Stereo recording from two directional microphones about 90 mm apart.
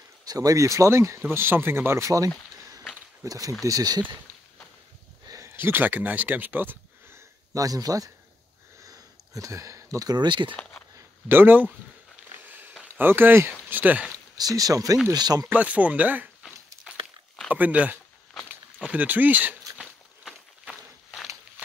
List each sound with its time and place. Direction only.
0.2 s speech: 45° right (ahead or behind)
5.2 s a sound: 35° right (ahead or behind)
7.5 s speech: 40° right (ahead or behind)
8.8 s sniff: 40° right (ahead or behind)
10.1 s speech: 60° right (ahead or behind)
10.5 s speech: 15° left (ahead or behind)
11.2 s speech: 20° right (ahead or behind)
12.9 s speech: 25° right (ahead or behind)
14.3 s speech: 45° right (ahead or behind)
15.4 s speech: 15° right (ahead or behind)
16.9 s a sound: 10° right (ahead or behind)
17.5 s speech: 15° right (ahead or behind)
19.8 s a sound: centre (ahead or behind)